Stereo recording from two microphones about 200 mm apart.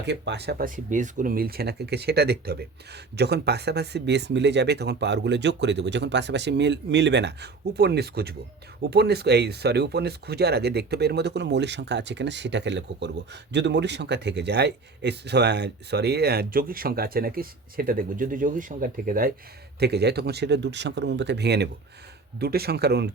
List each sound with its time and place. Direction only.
0.0 s speech: 60° right (ahead or behind)
0.9 s a man's voice: 40° right (ahead or behind); by 23.0 s 55° right (ahead or behind)